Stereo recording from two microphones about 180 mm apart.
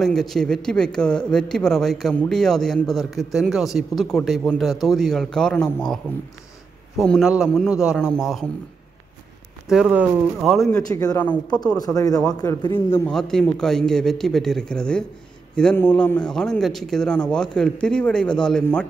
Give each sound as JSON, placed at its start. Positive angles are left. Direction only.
{"t": 0.0, "sound": "a man's voice", "side_deg": 0}
{"t": 7.0, "sound": "a man's voice", "side_deg": 0}
{"t": 9.7, "sound": "a man's voice", "side_deg": -5}
{"t": 10.9, "sound": "a man's voice", "side_deg": 20}
{"t": 11.6, "sound": "a man's voice", "side_deg": 20}